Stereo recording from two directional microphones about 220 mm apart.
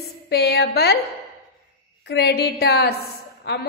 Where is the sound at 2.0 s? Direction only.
45° left (ahead or behind).